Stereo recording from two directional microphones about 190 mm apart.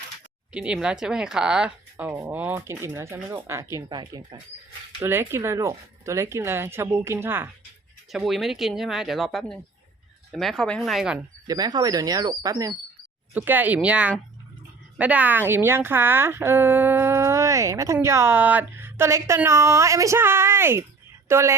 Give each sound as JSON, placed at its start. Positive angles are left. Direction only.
{"t": 0.5, "sound": "a woman's voice", "side_deg": -5}
{"t": 8.1, "sound": "speech", "side_deg": 0}
{"t": 11.4, "sound": "a woman's voice", "side_deg": -20}